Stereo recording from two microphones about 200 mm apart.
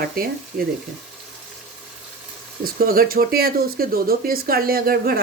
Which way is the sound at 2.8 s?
50° right (ahead or behind).